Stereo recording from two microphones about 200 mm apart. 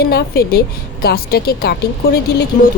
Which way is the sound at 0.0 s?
50° left (ahead or behind).